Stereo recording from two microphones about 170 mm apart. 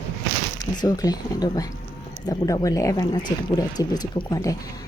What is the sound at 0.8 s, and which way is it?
A woman's voice, 25° left (ahead or behind).